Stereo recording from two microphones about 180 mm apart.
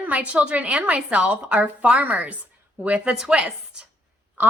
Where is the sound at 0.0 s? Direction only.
5° right (ahead or behind).